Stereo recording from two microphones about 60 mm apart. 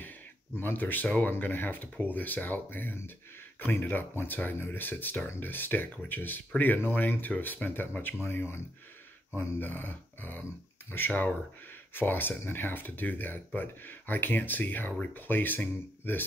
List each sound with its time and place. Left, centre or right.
0.6 s speech: left